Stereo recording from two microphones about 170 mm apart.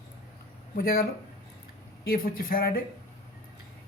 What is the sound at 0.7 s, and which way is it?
Speech, 60° left (ahead or behind).